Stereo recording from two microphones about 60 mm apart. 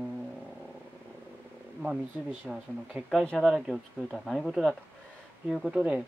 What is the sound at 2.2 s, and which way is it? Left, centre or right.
Speech, right.